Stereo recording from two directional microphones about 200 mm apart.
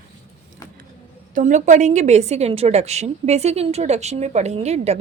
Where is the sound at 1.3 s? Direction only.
40° right (ahead or behind).